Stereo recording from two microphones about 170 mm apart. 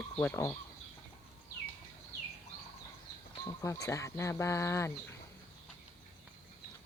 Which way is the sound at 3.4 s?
20° left (ahead or behind).